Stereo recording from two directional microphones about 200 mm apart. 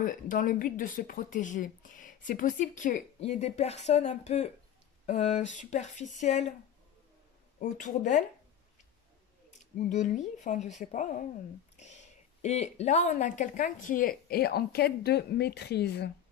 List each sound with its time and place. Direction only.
0.0 s speech: 40° left (ahead or behind)
7.5 s speech: 40° left (ahead or behind)
9.8 s speech: 35° left (ahead or behind); by 16.1 s 55° left (ahead or behind)